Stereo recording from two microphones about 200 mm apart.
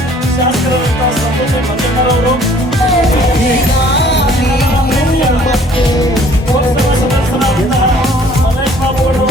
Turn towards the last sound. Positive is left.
turn(degrees=0)  # may be behind; listen again after turning